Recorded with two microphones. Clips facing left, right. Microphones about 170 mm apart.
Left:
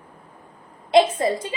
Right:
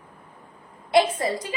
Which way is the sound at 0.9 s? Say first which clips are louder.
Left 3 dB; 25° left (ahead or behind).